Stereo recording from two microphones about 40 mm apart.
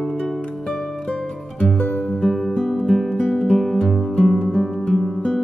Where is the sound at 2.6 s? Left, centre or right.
Centre.